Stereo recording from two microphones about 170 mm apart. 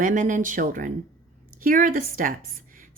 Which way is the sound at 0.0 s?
50° right (ahead or behind).